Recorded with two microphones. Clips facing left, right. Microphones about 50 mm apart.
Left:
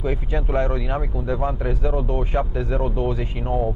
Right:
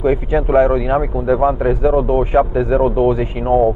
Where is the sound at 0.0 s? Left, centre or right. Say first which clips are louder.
Right 10 dB; centre.